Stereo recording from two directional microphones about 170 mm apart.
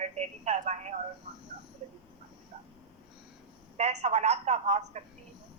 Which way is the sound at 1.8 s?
35° right (ahead or behind).